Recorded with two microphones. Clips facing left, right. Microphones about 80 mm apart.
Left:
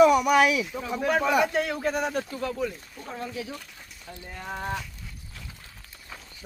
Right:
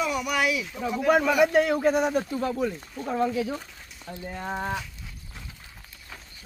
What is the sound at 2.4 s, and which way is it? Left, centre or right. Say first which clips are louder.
Speech: right 3 dB; right.